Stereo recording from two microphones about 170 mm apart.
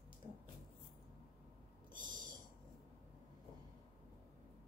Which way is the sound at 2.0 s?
25° right (ahead or behind).